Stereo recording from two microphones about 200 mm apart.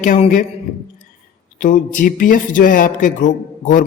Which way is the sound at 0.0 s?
40° left (ahead or behind).